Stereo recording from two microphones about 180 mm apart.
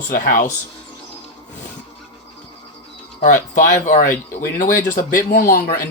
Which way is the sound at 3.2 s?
45° left (ahead or behind).